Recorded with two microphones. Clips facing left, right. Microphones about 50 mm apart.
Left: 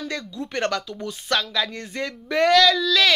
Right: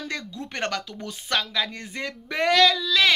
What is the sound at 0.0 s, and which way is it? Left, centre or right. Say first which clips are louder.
Speech: left 2 dB; right.